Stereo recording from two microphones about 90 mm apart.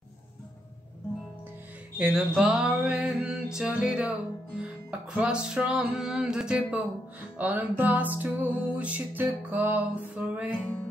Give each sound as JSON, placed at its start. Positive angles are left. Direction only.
{"t": 2.0, "sound": "music", "side_deg": -10}